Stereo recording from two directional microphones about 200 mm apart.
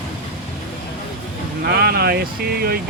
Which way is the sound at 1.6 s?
50° right (ahead or behind).